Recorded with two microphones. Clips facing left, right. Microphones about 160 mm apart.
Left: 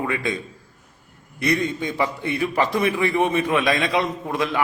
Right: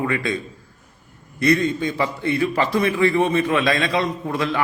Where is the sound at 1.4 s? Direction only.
20° left (ahead or behind).